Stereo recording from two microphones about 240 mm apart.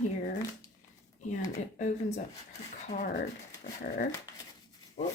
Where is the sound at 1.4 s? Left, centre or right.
Left.